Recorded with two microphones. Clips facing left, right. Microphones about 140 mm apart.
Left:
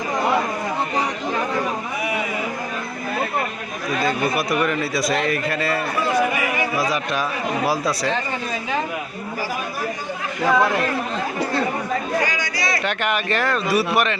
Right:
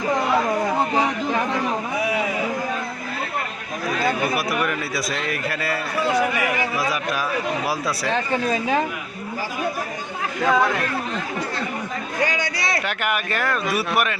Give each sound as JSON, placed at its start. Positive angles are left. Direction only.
{"t": 4.0, "sound": "a man's voice", "side_deg": -5}
{"t": 7.7, "sound": "a man's voice", "side_deg": -5}
{"t": 10.4, "sound": "a man's voice", "side_deg": 5}
{"t": 13.0, "sound": "a man's voice", "side_deg": -5}